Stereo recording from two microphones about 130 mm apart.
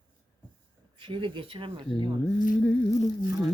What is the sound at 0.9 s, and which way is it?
Speech, 40° right (ahead or behind).